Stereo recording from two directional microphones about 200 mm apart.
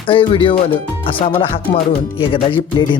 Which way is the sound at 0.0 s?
25° left (ahead or behind).